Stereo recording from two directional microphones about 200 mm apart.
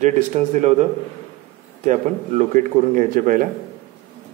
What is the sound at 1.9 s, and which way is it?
Speech, 40° right (ahead or behind).